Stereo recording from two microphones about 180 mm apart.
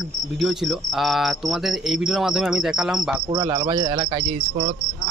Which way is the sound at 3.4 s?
25° right (ahead or behind).